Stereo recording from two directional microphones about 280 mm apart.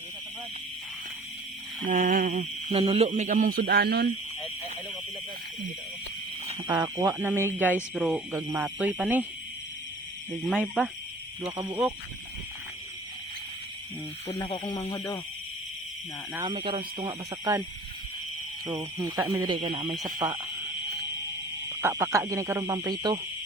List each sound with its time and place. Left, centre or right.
1.9 s speech: right
6.5 s speech: centre
10.4 s speech: centre
14.4 s speech: centre
16.3 s speech: centre
18.6 s speech: centre
21.7 s speech: centre